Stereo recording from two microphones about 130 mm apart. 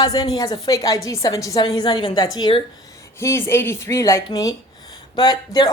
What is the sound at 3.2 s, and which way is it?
A woman's voice, 20° left (ahead or behind).